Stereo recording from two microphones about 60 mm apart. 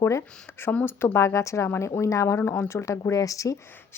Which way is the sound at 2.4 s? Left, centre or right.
Left.